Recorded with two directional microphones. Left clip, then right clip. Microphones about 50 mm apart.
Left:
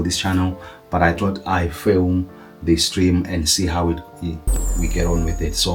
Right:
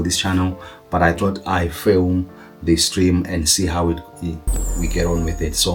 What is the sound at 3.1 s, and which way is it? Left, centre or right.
Speech, centre.